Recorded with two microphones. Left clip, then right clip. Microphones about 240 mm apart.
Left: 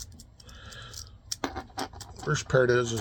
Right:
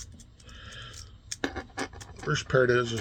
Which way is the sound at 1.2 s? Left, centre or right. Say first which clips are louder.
Even; centre.